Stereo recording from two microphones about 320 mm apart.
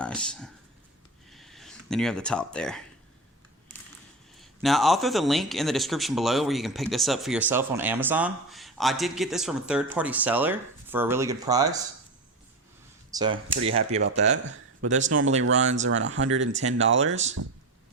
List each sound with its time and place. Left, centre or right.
0.0 s speech: centre
1.3 s a sound: centre
4.4 s speech: centre
13.1 s speech: centre
14.0 s speech: right
17.4 s speech: right